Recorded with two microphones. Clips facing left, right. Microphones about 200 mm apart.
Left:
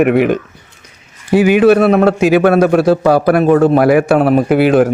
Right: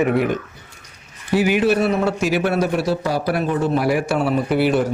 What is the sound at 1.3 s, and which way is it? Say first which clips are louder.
Speech: left 7 dB; 15° left (ahead or behind).